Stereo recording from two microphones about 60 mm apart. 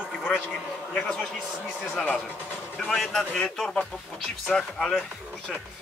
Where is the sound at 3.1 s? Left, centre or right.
Centre.